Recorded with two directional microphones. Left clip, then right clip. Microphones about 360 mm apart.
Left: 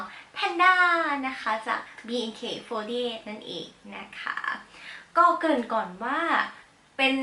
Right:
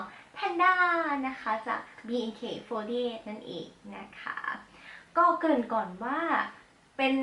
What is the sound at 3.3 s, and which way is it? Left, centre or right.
Speech, right.